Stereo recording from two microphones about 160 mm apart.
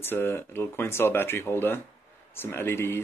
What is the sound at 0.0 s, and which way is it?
Speech, 15° left (ahead or behind).